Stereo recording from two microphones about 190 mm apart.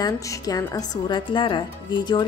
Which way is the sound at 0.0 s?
20° left (ahead or behind).